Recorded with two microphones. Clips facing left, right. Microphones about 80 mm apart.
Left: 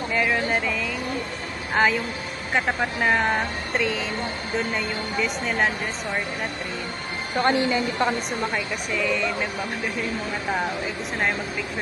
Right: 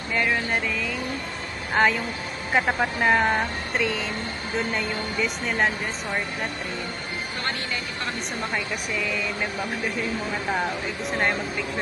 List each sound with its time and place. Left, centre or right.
0.1 s speech: centre
7.3 s speech: left
8.9 s speech: centre